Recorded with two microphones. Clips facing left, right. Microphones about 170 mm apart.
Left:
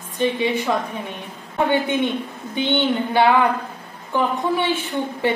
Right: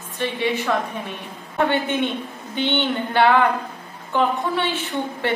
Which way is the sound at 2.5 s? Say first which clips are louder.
Left 2 dB; 15° left (ahead or behind).